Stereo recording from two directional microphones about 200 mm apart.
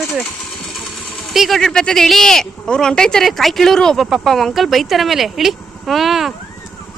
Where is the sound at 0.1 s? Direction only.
Centre (ahead or behind).